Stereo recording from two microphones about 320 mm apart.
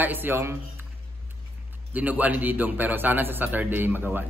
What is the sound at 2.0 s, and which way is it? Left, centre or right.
A man's voice, centre.